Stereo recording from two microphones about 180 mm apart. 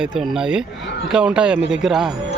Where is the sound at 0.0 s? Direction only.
5° right (ahead or behind).